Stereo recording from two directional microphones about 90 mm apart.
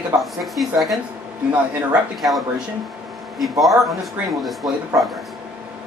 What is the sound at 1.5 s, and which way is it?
Speech, 15° right (ahead or behind).